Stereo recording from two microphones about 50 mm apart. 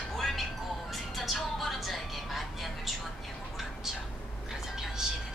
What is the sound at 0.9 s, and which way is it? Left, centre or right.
Vehicle, centre.